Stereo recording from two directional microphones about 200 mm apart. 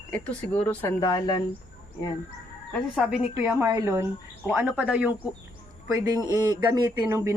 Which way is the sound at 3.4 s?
10° right (ahead or behind).